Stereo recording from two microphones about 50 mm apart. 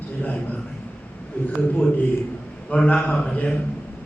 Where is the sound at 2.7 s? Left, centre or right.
Left.